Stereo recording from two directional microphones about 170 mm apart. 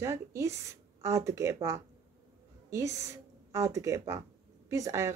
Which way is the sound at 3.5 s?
15° right (ahead or behind).